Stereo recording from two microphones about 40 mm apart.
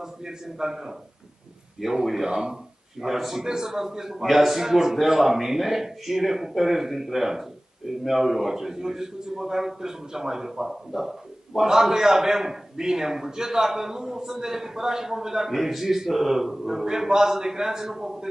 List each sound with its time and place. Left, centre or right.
0.0 s speech: centre
2.2 s speech: centre
2.5 s speech: centre